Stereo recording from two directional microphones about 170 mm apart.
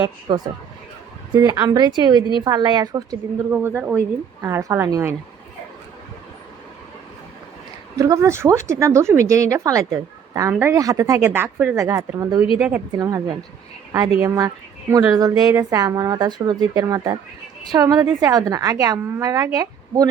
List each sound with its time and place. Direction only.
0.3 s speech: 25° right (ahead or behind)
3.5 s speech: 10° right (ahead or behind)
7.9 s speech: 20° right (ahead or behind)
12.5 s speech: 5° right (ahead or behind)
12.9 s a woman's voice: 20° right (ahead or behind)